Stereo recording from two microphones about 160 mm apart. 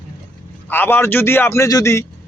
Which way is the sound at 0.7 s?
15° left (ahead or behind).